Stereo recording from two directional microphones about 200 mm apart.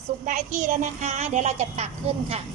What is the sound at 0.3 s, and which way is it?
A woman's voice, 40° right (ahead or behind).